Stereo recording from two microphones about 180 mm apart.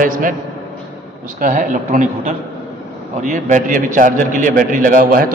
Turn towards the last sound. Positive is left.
turn(degrees=-50)  # may be behind; listen again after turning